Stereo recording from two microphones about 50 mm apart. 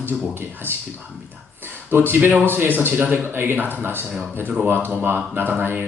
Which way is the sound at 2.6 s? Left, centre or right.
Right.